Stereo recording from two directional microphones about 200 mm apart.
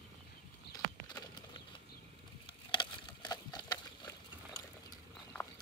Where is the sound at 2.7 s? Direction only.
25° left (ahead or behind).